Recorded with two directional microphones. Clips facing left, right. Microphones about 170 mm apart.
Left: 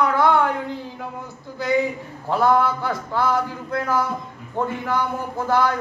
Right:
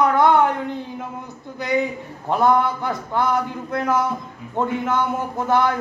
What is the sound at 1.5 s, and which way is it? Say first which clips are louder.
A man's voice: left 1 dB; 20° right (ahead or behind).